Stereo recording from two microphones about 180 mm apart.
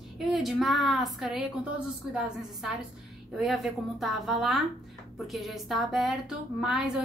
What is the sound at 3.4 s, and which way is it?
A woman's voice, centre (ahead or behind).